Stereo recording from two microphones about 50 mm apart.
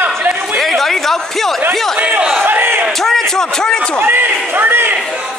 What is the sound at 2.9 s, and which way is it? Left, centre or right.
Speech, centre.